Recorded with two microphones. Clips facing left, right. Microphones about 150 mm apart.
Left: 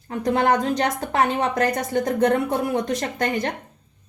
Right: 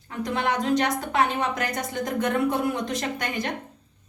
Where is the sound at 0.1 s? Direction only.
45° left (ahead or behind).